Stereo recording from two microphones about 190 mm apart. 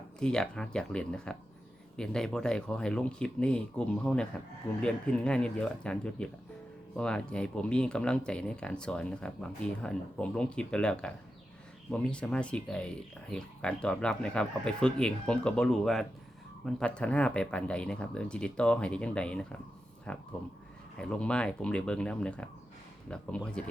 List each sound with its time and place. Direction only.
0.2 s speech: 5° left (ahead or behind)